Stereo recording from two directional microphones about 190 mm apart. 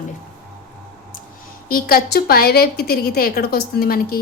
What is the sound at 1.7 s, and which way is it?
A woman's voice, 50° left (ahead or behind).